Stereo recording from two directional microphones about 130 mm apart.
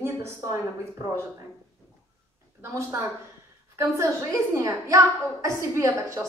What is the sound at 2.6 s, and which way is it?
Speech, 20° right (ahead or behind).